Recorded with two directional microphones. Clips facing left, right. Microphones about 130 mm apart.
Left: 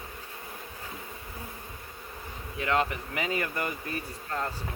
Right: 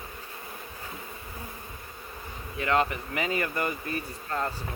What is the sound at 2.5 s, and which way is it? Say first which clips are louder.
Speech: right 2 dB; 50° right (ahead or behind).